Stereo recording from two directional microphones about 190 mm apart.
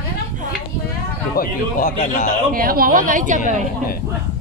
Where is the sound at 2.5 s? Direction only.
50° right (ahead or behind).